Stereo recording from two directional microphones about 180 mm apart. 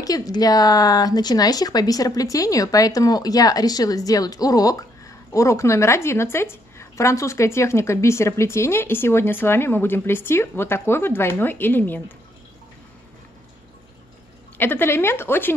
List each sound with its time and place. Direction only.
0.0 s speech: 20° left (ahead or behind)
14.6 s speech: 10° left (ahead or behind)